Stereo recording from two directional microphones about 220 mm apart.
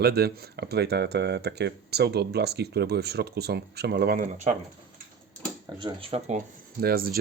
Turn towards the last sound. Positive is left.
turn(degrees=-45)  # may be behind; listen again after turning